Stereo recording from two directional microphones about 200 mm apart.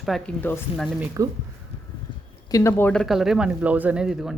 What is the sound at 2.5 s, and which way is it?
Speech, 10° left (ahead or behind).